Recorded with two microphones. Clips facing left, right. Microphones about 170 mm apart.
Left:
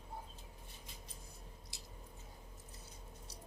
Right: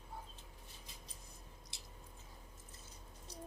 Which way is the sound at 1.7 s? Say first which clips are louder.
Left 2 dB; 25° right (ahead or behind).